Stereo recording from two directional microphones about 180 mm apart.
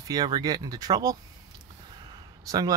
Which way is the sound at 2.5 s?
20° right (ahead or behind).